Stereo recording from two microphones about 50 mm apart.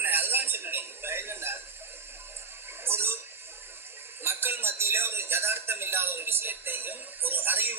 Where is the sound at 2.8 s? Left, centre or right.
Right.